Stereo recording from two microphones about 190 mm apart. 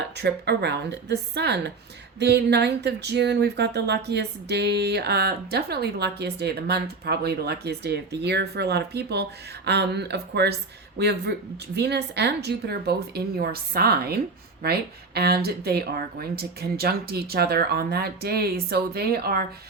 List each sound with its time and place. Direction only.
0.2 s speech: 60° right (ahead or behind)